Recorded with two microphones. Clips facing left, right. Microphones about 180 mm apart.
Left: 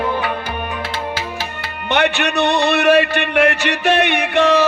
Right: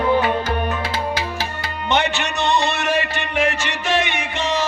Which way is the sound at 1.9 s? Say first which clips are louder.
Left 4 dB; 60° left (ahead or behind).